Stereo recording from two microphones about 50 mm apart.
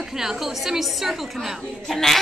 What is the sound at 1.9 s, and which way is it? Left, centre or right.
Speech, centre.